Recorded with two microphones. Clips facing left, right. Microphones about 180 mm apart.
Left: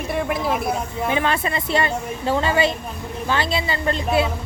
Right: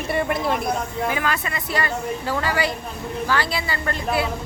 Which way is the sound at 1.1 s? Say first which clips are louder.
Left 7 dB; 25° left (ahead or behind).